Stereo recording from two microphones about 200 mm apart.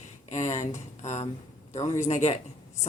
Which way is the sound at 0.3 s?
35° left (ahead or behind).